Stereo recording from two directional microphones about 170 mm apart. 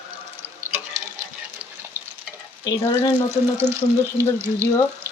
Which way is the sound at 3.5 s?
15° right (ahead or behind).